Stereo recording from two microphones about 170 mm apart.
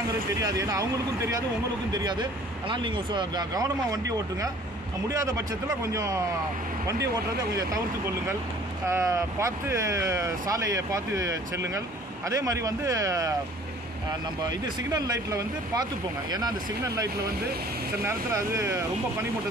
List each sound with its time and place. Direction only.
0.4 s speech: 20° right (ahead or behind)
1.9 s speech: 25° right (ahead or behind)
5.9 s speech: 20° right (ahead or behind)
8.8 s speech: 15° right (ahead or behind)
14.9 s speech: 20° right (ahead or behind)